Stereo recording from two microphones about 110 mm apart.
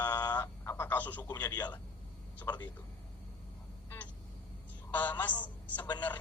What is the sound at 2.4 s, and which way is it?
Speech, 40° left (ahead or behind).